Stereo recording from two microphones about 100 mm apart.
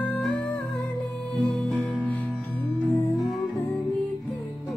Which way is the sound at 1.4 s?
5° left (ahead or behind).